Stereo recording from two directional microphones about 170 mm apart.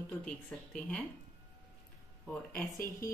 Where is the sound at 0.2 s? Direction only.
5° left (ahead or behind).